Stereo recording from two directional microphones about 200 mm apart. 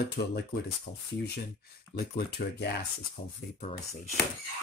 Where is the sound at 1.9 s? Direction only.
50° left (ahead or behind).